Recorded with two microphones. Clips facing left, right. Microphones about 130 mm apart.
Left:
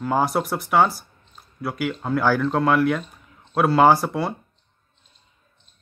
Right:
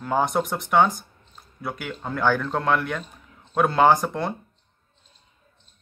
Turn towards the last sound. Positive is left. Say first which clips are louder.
# left 2 dB
turn(degrees=5)  # may be behind; listen again after turning